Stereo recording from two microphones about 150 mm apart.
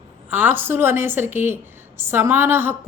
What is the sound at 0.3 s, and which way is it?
A woman's voice, 15° right (ahead or behind).